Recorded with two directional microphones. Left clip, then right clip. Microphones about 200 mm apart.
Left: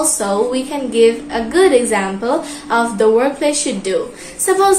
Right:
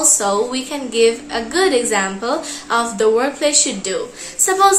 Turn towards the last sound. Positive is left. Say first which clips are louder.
# left 2 dB
turn(degrees=-20)  # may be behind; listen again after turning